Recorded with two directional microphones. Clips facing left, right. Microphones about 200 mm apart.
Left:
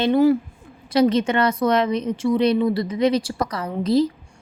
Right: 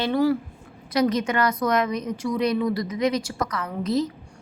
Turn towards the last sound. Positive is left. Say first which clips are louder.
# left 5 dB
turn(degrees=30)  # may be behind; listen again after turning